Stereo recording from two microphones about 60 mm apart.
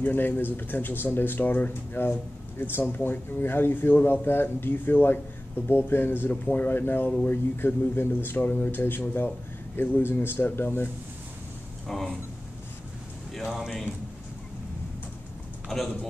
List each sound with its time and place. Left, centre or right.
0.0 s speech: left
11.9 s speech: centre
13.3 s speech: centre